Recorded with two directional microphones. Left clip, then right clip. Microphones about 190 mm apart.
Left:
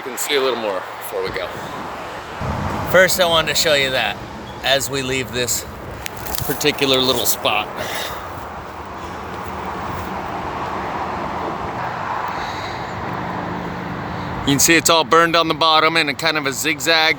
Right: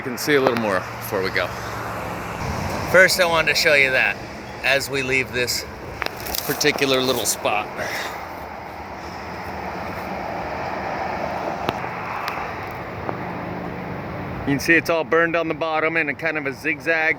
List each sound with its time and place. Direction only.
0.3 s speech: 5° left (ahead or behind)
2.9 s speech: 10° left (ahead or behind)
6.6 s speech: 10° left (ahead or behind)
14.4 s speech: 15° left (ahead or behind)